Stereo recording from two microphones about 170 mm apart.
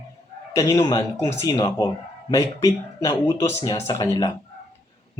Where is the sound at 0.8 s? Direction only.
15° left (ahead or behind).